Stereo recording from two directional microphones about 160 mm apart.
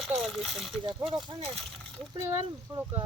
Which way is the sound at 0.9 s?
35° right (ahead or behind).